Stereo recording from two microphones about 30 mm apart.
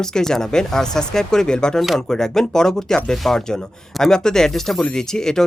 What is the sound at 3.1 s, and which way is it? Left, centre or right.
Speech, centre.